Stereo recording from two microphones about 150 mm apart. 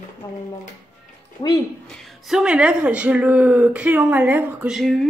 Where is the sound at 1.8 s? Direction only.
Centre (ahead or behind).